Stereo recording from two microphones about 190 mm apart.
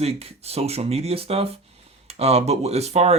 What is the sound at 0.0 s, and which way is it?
Speech, 30° right (ahead or behind).